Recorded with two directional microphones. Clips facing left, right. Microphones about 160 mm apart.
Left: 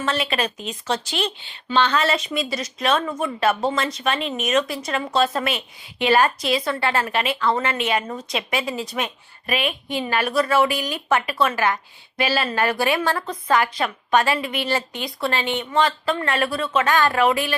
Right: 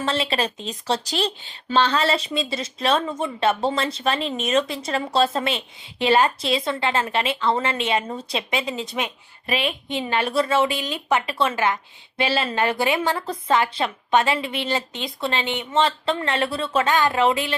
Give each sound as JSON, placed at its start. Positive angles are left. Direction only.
{"t": 0.0, "sound": "a woman's voice", "side_deg": -30}